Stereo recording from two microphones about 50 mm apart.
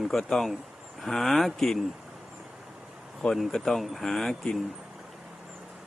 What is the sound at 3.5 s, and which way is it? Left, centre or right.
Speech, centre.